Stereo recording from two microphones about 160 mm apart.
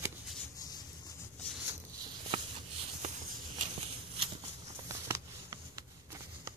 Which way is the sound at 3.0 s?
45° right (ahead or behind).